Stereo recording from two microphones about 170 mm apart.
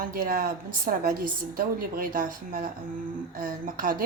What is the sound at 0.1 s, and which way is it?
A woman's voice, 55° right (ahead or behind).